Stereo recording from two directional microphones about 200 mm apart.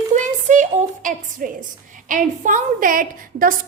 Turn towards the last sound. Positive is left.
turn(degrees=-45)  # may be behind; listen again after turning